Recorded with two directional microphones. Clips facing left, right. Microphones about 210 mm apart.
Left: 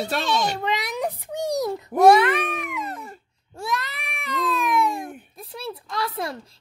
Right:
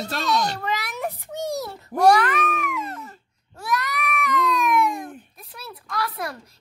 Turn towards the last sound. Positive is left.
turn(degrees=25)  # may be behind; listen again after turning